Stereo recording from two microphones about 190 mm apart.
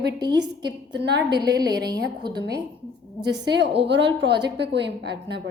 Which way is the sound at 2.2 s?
20° right (ahead or behind).